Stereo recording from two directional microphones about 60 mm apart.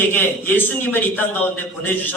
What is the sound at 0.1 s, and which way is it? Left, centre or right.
A man's voice, left.